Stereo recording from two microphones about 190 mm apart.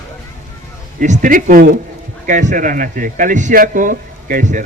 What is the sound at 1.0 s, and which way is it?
A man's voice, 40° right (ahead or behind).